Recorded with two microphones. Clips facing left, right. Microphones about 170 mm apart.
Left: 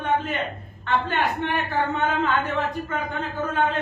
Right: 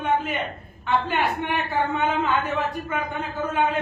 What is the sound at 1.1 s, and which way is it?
A woman's voice, 10° right (ahead or behind).